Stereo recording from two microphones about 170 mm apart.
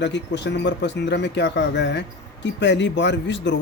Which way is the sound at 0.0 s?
90° left.